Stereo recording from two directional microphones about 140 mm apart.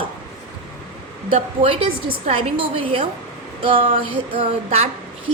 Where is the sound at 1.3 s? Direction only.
40° right (ahead or behind).